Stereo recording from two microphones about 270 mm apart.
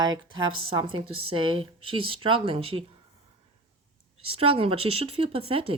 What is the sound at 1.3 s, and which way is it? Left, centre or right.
Speech, centre.